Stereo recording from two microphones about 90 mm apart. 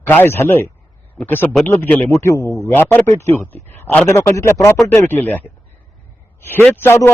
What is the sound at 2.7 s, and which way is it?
A man's voice, 25° left (ahead or behind).